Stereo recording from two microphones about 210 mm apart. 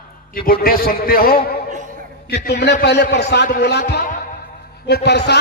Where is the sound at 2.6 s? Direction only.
55° left (ahead or behind).